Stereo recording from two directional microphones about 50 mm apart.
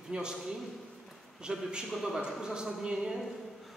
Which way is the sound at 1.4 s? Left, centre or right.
Centre.